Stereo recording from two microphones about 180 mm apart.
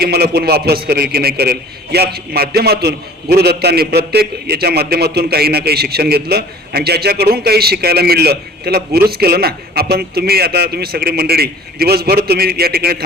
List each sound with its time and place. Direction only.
0.0 s a man's voice: 60° right (ahead or behind)